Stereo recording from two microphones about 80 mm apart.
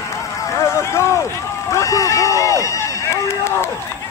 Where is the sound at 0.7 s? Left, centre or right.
Left.